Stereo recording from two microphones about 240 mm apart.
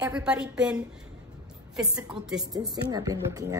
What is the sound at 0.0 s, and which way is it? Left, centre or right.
Speech, centre.